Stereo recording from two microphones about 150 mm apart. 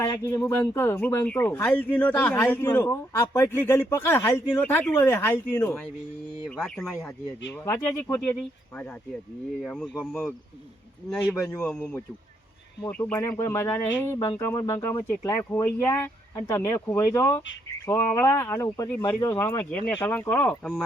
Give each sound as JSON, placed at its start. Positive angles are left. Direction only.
{"t": 0.3, "sound": "speech", "side_deg": 15}
{"t": 6.6, "sound": "speech", "side_deg": 0}
{"t": 7.6, "sound": "speech", "side_deg": 15}
{"t": 11.3, "sound": "speech", "side_deg": 20}
{"t": 11.6, "sound": "speech", "side_deg": 5}
{"t": 13.1, "sound": "speech", "side_deg": 15}